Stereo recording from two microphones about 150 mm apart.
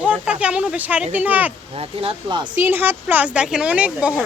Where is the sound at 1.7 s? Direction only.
40° right (ahead or behind).